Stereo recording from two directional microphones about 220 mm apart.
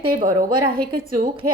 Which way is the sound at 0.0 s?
40° right (ahead or behind).